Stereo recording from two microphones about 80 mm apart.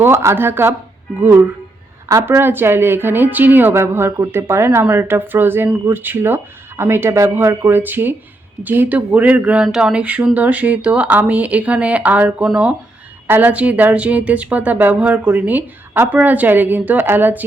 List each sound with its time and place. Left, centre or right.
0.0 s speech: right
2.2 s speech: right